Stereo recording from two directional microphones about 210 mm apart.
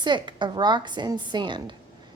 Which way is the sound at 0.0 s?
20° right (ahead or behind).